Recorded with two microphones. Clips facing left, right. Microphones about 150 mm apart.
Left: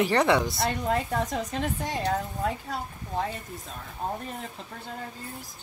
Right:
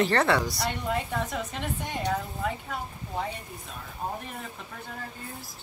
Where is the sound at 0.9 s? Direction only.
35° left (ahead or behind).